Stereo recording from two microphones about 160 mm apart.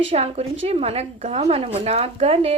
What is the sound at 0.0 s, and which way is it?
Speech, 40° right (ahead or behind).